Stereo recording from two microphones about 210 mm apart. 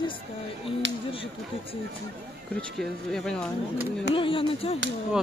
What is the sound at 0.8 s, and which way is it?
Speech, 60° right (ahead or behind).